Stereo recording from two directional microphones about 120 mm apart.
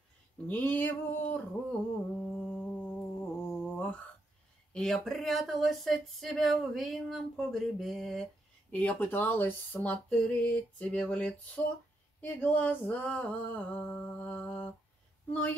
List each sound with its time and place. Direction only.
0.5 s speech: 15° left (ahead or behind)
1.7 s humming: 5° left (ahead or behind)
4.7 s speech: 5° left (ahead or behind)
8.7 s speech: 15° left (ahead or behind)
12.2 s a sound: 15° left (ahead or behind)